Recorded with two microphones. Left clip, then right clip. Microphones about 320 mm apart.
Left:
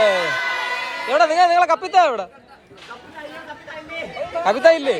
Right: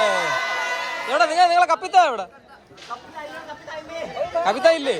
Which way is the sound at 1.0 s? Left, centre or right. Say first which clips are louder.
Left 2 dB; centre.